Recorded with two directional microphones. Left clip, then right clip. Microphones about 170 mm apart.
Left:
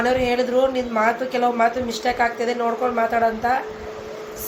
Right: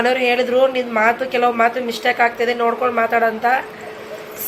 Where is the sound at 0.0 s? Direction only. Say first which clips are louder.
Right 3 dB; 15° right (ahead or behind).